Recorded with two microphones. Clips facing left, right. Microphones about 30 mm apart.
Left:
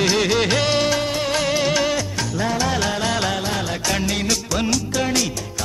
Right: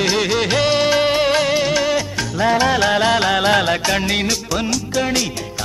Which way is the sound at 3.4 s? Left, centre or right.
Right.